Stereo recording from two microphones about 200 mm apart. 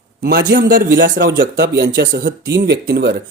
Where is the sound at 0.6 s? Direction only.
45° right (ahead or behind).